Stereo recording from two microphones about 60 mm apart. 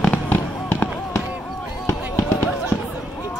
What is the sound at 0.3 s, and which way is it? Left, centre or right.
Fireworks, left.